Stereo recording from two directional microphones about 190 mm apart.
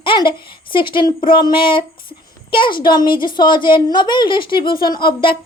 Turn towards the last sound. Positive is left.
turn(degrees=25)  # may be behind; listen again after turning